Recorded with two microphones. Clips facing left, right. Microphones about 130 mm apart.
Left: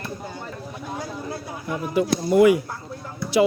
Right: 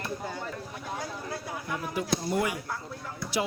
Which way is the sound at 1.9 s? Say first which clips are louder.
Left 12 dB; 90° left.